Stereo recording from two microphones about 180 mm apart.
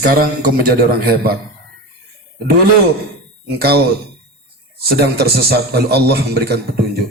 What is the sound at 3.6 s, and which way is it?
A man's voice, 60° right (ahead or behind).